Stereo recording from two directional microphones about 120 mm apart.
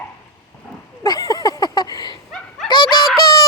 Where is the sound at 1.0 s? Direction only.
30° left (ahead or behind).